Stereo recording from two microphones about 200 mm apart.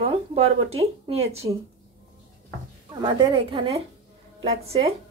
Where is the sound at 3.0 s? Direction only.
25° right (ahead or behind).